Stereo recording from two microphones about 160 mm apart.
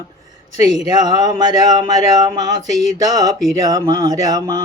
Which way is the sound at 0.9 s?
25° right (ahead or behind).